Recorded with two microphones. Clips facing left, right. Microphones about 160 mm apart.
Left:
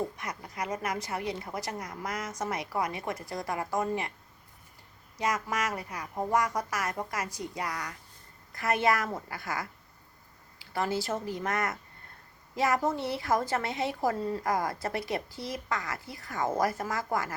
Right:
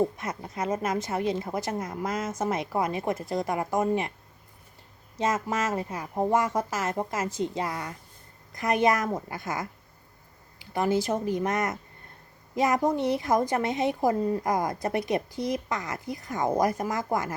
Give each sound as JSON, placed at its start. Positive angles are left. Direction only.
{"t": 0.0, "sound": "a woman's voice", "side_deg": -25}
{"t": 5.1, "sound": "a woman's voice", "side_deg": -25}